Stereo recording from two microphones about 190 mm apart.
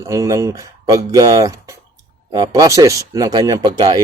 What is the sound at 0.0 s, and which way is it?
Speech, 15° right (ahead or behind).